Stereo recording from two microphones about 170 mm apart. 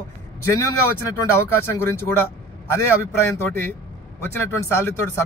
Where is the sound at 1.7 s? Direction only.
15° left (ahead or behind).